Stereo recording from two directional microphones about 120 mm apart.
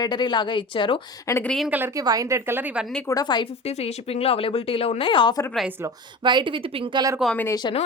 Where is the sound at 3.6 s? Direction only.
55° left (ahead or behind).